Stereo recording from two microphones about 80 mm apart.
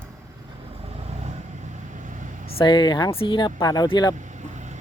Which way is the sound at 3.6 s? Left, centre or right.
Left.